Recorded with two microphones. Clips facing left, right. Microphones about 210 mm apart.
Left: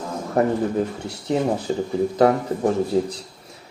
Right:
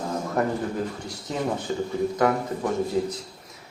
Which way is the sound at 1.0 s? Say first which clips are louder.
Left 6 dB; 30° left (ahead or behind).